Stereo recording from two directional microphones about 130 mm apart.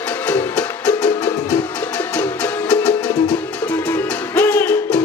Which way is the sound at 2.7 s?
10° left (ahead or behind).